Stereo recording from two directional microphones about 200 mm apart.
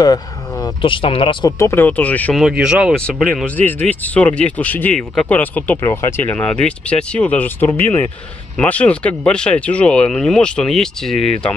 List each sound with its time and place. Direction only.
0.0 s speech: 20° left (ahead or behind)
2.4 s speech: 5° right (ahead or behind)